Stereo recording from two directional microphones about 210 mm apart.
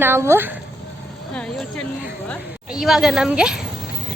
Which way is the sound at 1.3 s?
5° left (ahead or behind).